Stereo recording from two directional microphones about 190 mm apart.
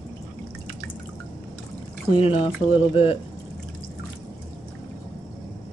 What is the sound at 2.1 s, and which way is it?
Speech, 30° left (ahead or behind).